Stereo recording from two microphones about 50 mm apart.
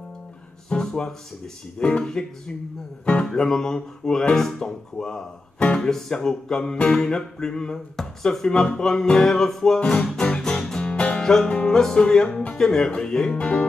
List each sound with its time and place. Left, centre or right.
0.7 s music: centre
1.8 s speech: left
2.0 s music: centre
4.9 s speech: centre
6.1 s music: centre
9.8 s speech: centre
10.1 s music: centre